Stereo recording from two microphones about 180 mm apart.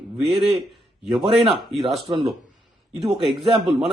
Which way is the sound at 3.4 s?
25° right (ahead or behind).